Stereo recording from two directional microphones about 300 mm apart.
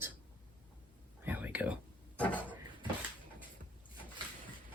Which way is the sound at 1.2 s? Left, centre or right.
Centre.